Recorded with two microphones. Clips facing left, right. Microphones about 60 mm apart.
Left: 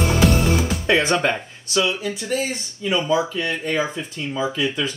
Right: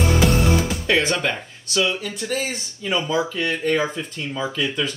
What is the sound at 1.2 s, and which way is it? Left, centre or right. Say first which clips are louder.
Speech: left 3 dB; left.